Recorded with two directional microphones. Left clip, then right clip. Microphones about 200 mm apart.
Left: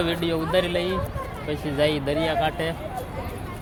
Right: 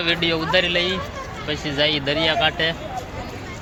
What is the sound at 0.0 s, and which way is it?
A woman's voice, 10° left (ahead or behind).